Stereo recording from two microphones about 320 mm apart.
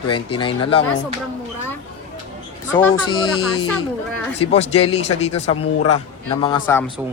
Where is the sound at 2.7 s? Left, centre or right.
Centre.